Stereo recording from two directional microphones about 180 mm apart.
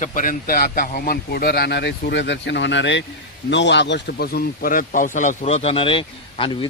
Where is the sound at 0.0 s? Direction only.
50° left (ahead or behind).